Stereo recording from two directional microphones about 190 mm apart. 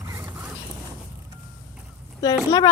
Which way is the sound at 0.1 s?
10° right (ahead or behind).